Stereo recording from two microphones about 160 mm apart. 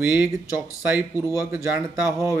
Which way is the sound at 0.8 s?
10° right (ahead or behind).